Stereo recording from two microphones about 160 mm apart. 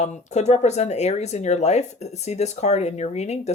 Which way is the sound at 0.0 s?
45° left (ahead or behind).